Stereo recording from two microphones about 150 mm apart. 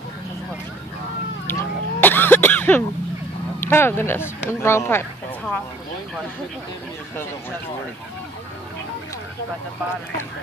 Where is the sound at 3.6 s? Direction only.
15° left (ahead or behind).